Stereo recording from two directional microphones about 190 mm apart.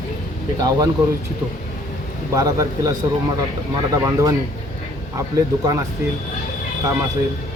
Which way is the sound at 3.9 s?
15° right (ahead or behind).